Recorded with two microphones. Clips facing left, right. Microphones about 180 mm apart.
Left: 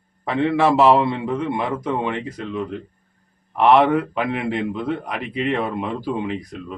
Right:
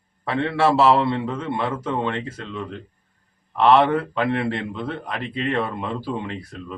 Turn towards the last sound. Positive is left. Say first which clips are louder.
# left 4 dB
turn(degrees=15)  # may be behind; listen again after turning